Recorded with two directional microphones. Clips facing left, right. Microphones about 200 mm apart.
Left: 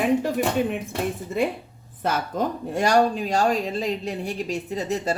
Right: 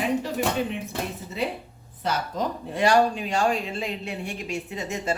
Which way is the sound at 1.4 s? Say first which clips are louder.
Left 4 dB; 50° left (ahead or behind).